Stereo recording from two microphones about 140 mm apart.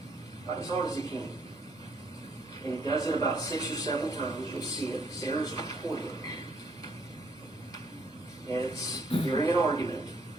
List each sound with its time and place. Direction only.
0.5 s a man's voice: 25° left (ahead or behind)
2.6 s a man's voice: 25° left (ahead or behind)
8.4 s a man's voice: 25° left (ahead or behind)